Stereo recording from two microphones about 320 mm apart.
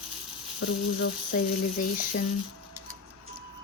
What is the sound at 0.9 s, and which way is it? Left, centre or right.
Speech, left.